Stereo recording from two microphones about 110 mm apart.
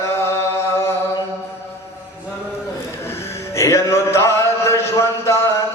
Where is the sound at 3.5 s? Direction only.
25° left (ahead or behind).